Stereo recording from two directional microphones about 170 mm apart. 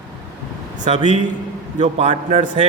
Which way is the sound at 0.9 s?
40° right (ahead or behind).